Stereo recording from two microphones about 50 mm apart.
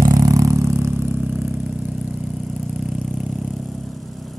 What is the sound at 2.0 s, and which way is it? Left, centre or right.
Vehicle, right.